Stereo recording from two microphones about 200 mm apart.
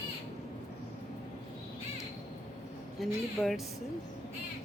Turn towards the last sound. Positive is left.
turn(degrees=0)  # may be behind; listen again after turning